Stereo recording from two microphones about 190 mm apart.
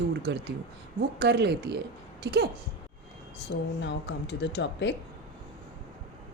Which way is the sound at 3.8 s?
70° left (ahead or behind).